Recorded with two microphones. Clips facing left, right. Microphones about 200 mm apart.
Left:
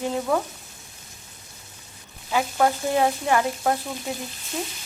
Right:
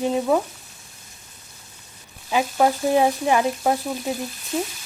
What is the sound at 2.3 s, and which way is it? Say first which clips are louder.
Speech: right 2 dB; 20° right (ahead or behind).